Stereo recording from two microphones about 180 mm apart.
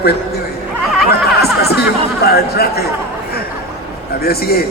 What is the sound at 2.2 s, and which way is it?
Speech, 60° left (ahead or behind).